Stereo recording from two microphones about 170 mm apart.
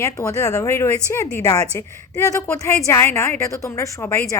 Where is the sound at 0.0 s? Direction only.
20° left (ahead or behind).